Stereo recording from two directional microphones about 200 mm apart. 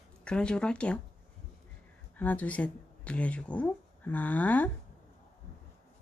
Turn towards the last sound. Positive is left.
turn(degrees=10)  # may be behind; listen again after turning